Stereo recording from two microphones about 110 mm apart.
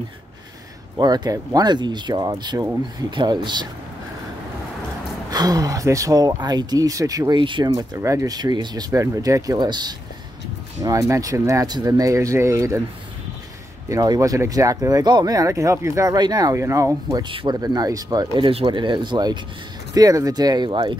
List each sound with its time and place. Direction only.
0.9 s speech: 40° right (ahead or behind)
5.3 s speech: 35° right (ahead or behind)
8.0 s speech: 25° right (ahead or behind)
10.8 s speech: 30° right (ahead or behind)
13.8 s speech: 30° right (ahead or behind)
16.5 s speech: 25° right (ahead or behind)
17.2 s speech: 50° right (ahead or behind)
17.6 s speech: 35° right (ahead or behind)
18.4 s speech: 55° right (ahead or behind)